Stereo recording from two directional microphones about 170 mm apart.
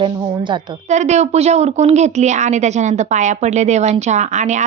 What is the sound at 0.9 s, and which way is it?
A woman's voice, 40° right (ahead or behind).